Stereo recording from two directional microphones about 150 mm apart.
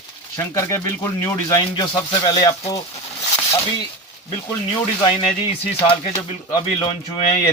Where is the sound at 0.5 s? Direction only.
20° left (ahead or behind).